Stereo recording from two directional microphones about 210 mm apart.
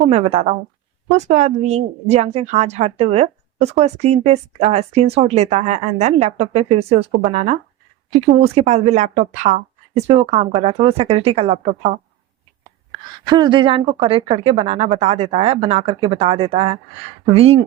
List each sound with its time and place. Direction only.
0.1 s speech: 30° right (ahead or behind)
13.3 s speech: 20° right (ahead or behind)